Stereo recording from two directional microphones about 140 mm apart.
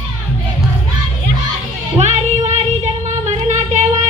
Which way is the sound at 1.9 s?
50° right (ahead or behind).